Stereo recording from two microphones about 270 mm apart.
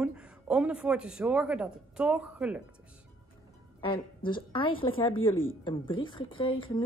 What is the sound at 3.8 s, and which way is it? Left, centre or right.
A woman's voice, centre.